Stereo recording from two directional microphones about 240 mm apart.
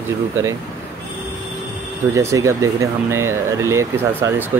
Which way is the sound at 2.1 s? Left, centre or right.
Centre.